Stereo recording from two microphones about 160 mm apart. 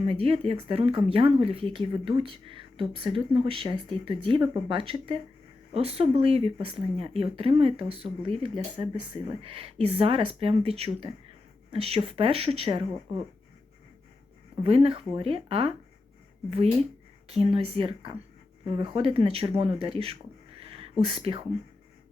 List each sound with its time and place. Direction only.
0.0 s speech: 35° right (ahead or behind)
14.6 s speech: 35° right (ahead or behind)
17.2 s speech: 40° right (ahead or behind)
20.6 s a sound: 35° right (ahead or behind)
21.0 s speech: 35° right (ahead or behind)